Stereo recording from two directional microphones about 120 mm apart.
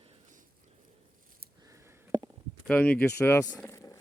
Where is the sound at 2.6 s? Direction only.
10° left (ahead or behind).